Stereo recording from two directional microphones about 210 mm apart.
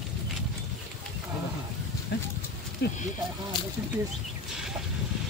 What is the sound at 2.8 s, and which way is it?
Speech, 50° left (ahead or behind).